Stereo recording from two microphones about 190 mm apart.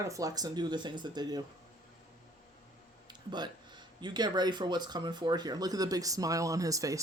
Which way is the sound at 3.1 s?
20° right (ahead or behind).